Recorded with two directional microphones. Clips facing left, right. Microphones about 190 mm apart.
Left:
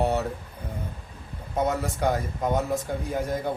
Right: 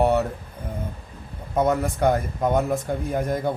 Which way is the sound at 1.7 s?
55° right (ahead or behind).